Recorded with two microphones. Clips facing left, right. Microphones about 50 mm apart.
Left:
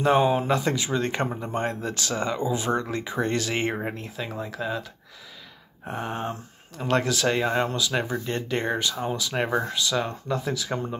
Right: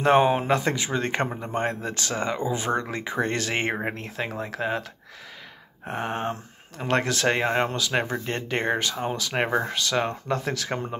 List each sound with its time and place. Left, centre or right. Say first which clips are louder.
0.0 s speech: right 1 dB; right
5.9 s speech: right 2 dB; right